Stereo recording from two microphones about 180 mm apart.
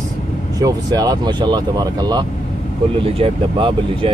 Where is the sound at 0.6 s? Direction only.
20° right (ahead or behind).